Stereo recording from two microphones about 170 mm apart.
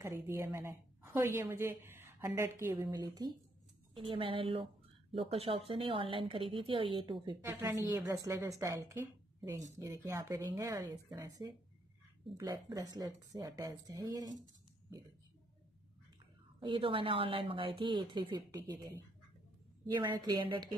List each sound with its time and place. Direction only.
0.0 s a woman's voice: 15° right (ahead or behind)
2.9 s a woman's voice: 25° right (ahead or behind)
16.5 s a woman's voice: 30° right (ahead or behind)
19.9 s a woman's voice: 25° right (ahead or behind)